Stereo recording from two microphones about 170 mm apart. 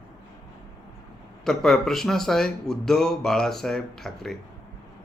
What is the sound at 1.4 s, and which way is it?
A man's voice, centre (ahead or behind).